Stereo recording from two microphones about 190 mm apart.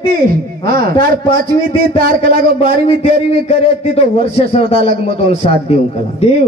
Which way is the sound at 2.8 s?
35° left (ahead or behind).